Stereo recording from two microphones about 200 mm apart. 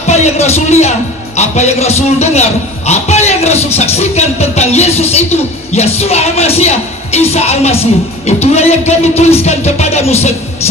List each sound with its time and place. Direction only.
0.0 s speech: 35° left (ahead or behind)